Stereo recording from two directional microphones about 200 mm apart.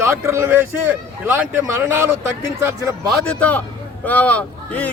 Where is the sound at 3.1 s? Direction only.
5° left (ahead or behind).